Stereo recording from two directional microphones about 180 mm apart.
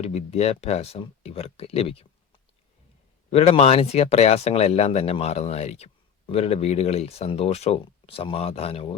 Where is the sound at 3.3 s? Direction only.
35° left (ahead or behind).